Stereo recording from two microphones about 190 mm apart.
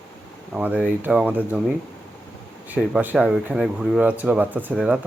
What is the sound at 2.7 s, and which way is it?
Speech, 5° right (ahead or behind).